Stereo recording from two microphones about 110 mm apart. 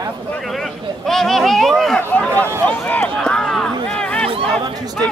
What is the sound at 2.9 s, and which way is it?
Run, 10° left (ahead or behind).